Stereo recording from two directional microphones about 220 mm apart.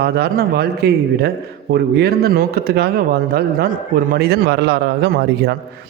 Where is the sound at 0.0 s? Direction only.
45° right (ahead or behind).